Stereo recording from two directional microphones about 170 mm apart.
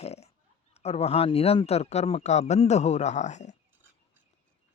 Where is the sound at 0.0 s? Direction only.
40° left (ahead or behind).